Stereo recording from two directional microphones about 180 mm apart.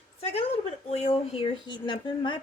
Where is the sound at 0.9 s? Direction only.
35° left (ahead or behind).